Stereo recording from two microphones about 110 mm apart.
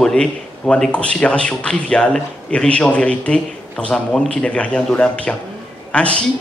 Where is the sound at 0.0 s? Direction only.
5° left (ahead or behind).